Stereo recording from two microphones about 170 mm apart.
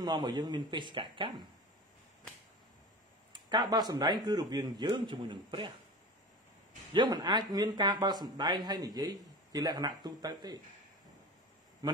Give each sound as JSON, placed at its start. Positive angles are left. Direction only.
{"t": 0.0, "sound": "speech", "side_deg": -25}
{"t": 3.3, "sound": "speech", "side_deg": -25}
{"t": 6.9, "sound": "speech", "side_deg": -25}
{"t": 11.8, "sound": "a man's voice", "side_deg": -20}